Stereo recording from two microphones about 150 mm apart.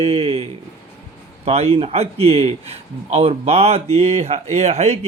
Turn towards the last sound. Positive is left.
turn(degrees=-45)  # may be behind; listen again after turning